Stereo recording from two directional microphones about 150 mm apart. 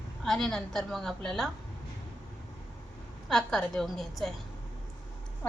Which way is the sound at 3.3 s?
5° left (ahead or behind).